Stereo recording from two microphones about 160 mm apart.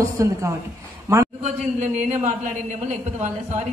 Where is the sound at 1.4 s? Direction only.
45° right (ahead or behind).